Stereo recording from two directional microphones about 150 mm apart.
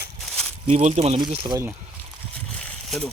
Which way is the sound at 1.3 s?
35° right (ahead or behind).